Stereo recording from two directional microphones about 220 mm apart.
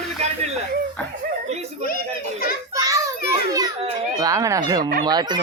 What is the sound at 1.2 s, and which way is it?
Chuckle, 30° right (ahead or behind).